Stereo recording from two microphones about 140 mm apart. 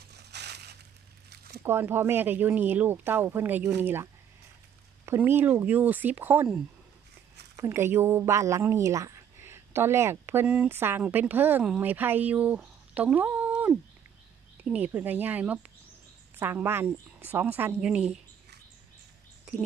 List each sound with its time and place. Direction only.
1.6 s a woman's voice: 15° right (ahead or behind)